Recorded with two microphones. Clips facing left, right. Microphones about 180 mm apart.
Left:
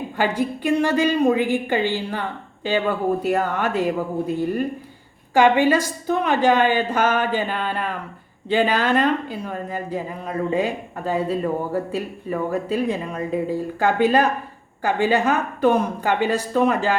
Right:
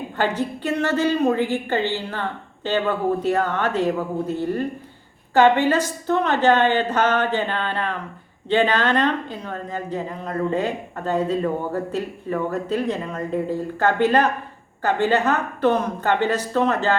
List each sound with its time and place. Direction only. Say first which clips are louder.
0.2 s a woman's voice: left 1 dB; 10° left (ahead or behind)